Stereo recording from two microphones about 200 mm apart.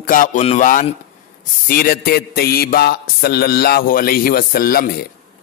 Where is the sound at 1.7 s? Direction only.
45° left (ahead or behind).